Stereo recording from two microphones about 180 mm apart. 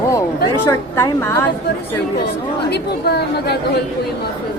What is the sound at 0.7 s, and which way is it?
Speech, 15° left (ahead or behind).